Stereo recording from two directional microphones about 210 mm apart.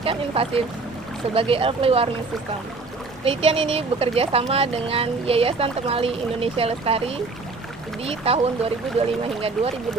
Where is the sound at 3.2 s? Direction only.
25° right (ahead or behind).